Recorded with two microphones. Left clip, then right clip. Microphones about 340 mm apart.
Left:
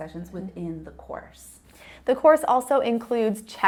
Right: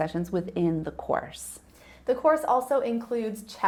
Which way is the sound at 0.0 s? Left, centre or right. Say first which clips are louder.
Right 8 dB; right.